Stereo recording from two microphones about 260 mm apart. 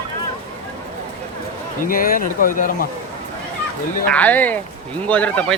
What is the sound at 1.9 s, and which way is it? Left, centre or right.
Speech, left.